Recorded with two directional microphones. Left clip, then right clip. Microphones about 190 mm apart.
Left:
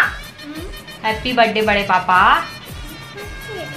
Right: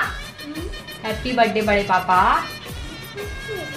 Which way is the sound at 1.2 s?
15° left (ahead or behind).